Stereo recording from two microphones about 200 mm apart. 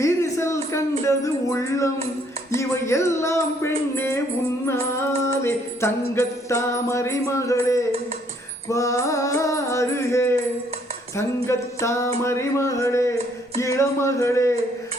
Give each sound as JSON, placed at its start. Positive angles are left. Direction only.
{"t": 0.0, "sound": "a sound", "side_deg": 15}
{"t": 1.0, "sound": "music", "side_deg": 15}
{"t": 5.4, "sound": "music", "side_deg": 15}
{"t": 11.4, "sound": "music", "side_deg": 15}